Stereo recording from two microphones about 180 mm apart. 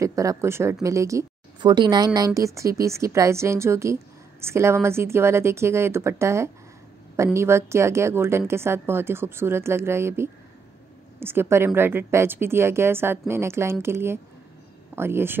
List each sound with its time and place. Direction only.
0.0 s a woman's voice: 20° right (ahead or behind)